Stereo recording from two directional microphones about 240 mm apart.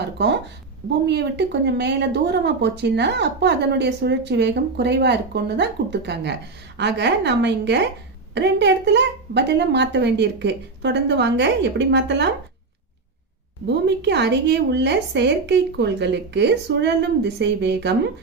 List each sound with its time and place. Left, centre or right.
0.2 s speech: right
13.7 s speech: right